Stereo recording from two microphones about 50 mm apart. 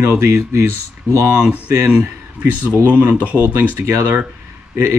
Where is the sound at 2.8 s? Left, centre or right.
Right.